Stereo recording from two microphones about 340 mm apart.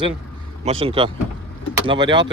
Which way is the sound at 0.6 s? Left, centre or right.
Centre.